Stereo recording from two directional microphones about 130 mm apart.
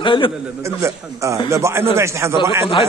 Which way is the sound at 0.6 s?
20° right (ahead or behind).